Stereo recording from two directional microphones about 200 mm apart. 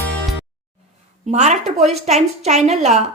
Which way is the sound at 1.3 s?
35° right (ahead or behind).